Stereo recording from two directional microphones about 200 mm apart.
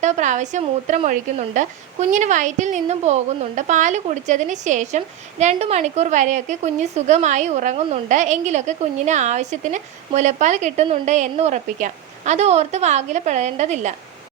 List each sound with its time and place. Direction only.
0.0 s speech: 35° right (ahead or behind)